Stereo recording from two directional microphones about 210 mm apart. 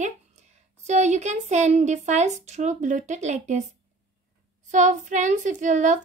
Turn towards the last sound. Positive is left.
turn(degrees=-35)  # may be behind; listen again after turning